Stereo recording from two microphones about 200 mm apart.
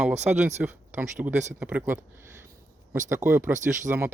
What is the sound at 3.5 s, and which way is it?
Speech, 40° right (ahead or behind).